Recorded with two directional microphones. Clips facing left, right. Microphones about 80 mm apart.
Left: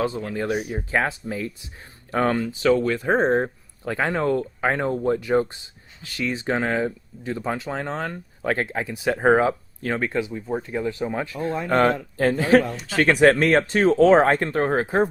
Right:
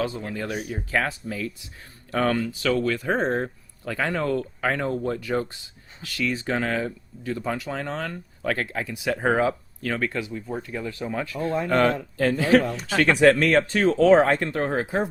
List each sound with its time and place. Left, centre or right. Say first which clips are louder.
0.3 s speech: left 5 dB; left